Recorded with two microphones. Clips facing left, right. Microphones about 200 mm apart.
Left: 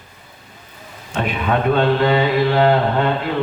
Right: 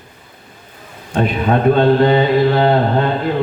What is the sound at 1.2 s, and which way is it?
A man's voice, 40° right (ahead or behind).